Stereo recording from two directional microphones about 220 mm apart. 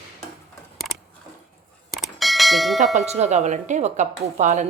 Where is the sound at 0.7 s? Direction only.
Centre (ahead or behind).